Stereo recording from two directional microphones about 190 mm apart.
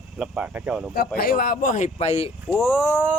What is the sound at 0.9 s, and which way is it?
Speech, 50° left (ahead or behind).